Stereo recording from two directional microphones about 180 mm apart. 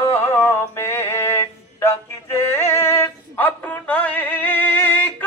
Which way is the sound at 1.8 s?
15° left (ahead or behind).